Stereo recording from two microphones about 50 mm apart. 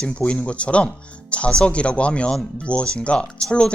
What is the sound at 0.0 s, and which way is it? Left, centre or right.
Speech, left.